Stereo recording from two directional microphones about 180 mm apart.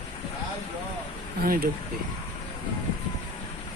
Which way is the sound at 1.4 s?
55° right (ahead or behind).